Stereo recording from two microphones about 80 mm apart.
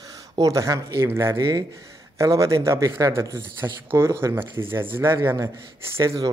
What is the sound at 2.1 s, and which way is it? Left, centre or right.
Speech, right.